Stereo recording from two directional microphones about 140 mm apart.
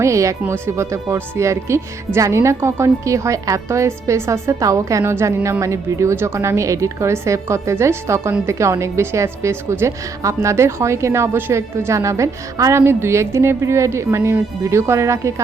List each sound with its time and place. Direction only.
0.0 s a woman's voice: 20° right (ahead or behind)